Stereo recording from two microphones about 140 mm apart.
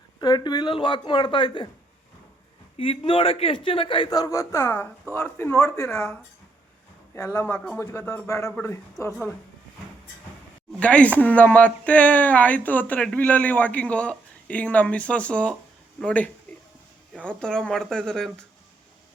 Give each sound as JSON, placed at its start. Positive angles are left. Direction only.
{"t": 0.2, "sound": "a man's voice", "side_deg": 30}
{"t": 2.7, "sound": "a man's voice", "side_deg": 40}
{"t": 7.3, "sound": "speech", "side_deg": 10}
{"t": 7.8, "sound": "speech", "side_deg": 20}
{"t": 10.7, "sound": "speech", "side_deg": 10}